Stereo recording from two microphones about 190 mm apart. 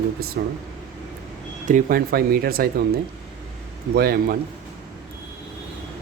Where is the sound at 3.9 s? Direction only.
50° right (ahead or behind).